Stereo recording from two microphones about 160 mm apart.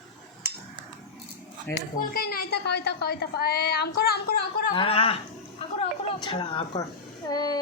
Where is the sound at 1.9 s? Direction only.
65° left (ahead or behind).